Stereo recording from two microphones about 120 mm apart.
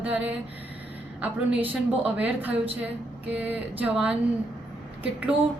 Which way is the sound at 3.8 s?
10° right (ahead or behind).